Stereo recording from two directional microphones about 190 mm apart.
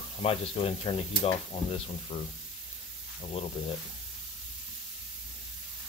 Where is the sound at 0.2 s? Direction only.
30° left (ahead or behind).